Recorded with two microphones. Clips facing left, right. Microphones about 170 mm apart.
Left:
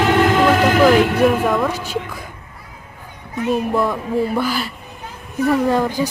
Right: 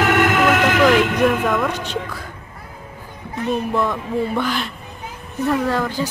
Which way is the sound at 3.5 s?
5° left (ahead or behind).